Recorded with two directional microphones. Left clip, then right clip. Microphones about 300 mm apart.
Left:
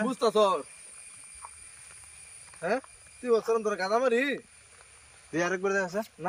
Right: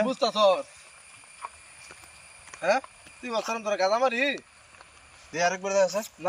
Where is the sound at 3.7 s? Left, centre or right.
Centre.